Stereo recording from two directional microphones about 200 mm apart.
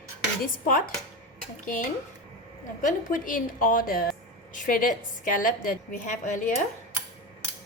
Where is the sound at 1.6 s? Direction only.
40° left (ahead or behind).